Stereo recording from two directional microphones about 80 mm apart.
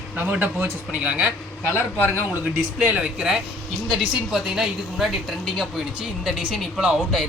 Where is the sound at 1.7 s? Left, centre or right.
Left.